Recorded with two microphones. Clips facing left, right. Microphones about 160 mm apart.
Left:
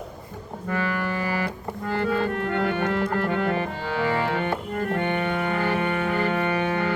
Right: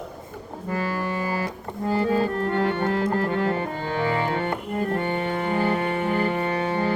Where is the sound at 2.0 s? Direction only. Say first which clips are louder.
Even; 35° right (ahead or behind).